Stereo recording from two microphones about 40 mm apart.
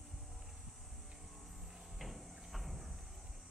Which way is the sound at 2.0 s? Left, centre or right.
Centre.